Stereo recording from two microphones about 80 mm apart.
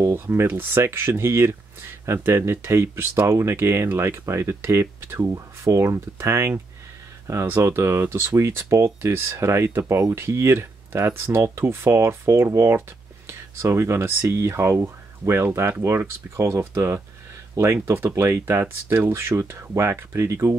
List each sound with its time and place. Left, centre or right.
0.0 s speech: right